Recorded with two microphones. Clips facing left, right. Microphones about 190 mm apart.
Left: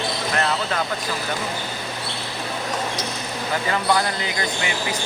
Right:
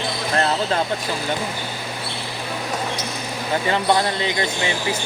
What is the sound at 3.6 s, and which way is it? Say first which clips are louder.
Speech: right 2 dB; 25° right (ahead or behind).